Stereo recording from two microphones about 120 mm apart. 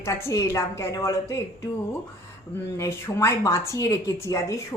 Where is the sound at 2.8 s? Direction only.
20° left (ahead or behind).